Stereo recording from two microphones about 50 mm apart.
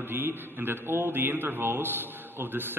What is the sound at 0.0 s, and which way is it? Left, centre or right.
A man's voice, right.